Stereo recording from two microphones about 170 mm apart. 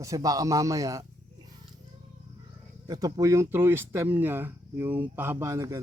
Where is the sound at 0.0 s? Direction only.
20° right (ahead or behind).